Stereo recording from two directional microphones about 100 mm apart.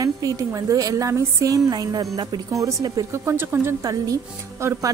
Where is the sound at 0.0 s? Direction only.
35° right (ahead or behind).